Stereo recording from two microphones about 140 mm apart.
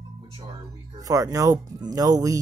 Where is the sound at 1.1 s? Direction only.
25° right (ahead or behind).